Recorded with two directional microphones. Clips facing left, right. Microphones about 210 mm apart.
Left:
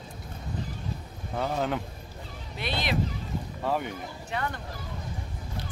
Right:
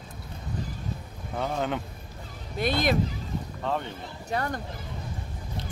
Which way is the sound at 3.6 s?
10° left (ahead or behind).